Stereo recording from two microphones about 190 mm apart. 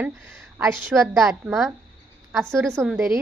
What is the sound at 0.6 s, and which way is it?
Speech, 15° right (ahead or behind).